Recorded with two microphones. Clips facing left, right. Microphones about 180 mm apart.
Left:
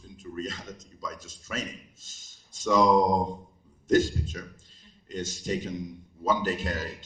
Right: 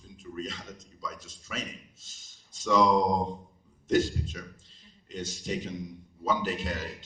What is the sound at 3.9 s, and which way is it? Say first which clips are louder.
A man's voice: left 3 dB; 45° left (ahead or behind).